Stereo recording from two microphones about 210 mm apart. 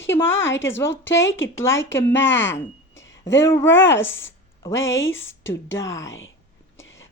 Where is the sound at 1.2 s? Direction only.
60° left (ahead or behind).